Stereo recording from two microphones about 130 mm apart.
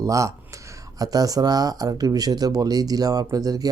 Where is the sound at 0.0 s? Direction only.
25° right (ahead or behind).